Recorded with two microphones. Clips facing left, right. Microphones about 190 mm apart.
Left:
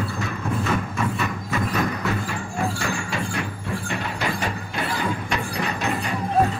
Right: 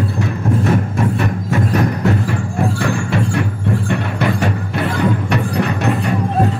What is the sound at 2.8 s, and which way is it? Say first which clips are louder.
Music: right 9 dB; 60° right (ahead or behind).